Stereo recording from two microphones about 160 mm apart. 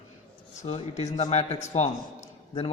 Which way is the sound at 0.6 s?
45° left (ahead or behind).